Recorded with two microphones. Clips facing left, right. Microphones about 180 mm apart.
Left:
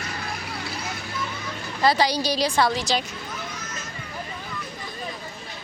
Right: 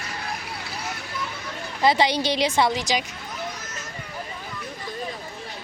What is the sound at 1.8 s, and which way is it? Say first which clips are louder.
A woman's voice: right 1 dB; 20° right (ahead or behind).